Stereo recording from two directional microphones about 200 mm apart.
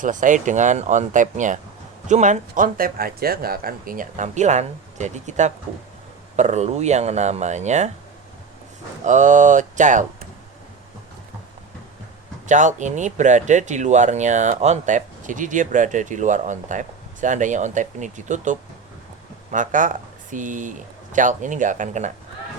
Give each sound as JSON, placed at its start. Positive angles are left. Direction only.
{"t": 0.0, "sound": "speech", "side_deg": -40}
{"t": 9.0, "sound": "speech", "side_deg": -35}
{"t": 12.5, "sound": "speech", "side_deg": -40}